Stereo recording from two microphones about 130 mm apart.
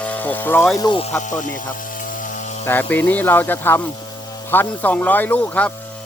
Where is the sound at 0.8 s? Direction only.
35° left (ahead or behind).